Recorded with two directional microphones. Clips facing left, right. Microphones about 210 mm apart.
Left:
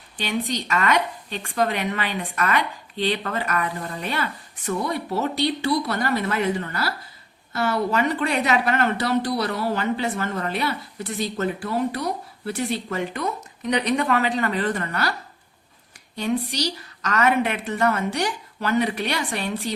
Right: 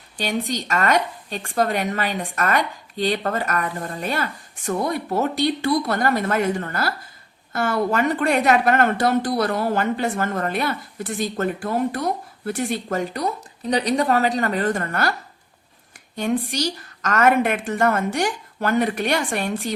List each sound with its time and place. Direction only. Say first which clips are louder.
0.2 s a woman's voice: right 1 dB; 45° right (ahead or behind)
16.1 s a woman's voice: right 2 dB; 50° right (ahead or behind)